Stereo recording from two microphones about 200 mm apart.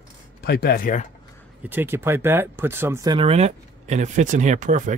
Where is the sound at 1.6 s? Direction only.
10° right (ahead or behind).